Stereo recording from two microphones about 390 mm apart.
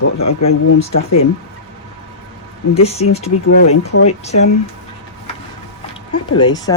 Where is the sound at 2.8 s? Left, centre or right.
Centre.